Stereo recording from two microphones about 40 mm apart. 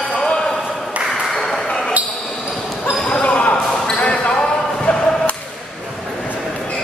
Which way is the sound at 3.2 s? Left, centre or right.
Left.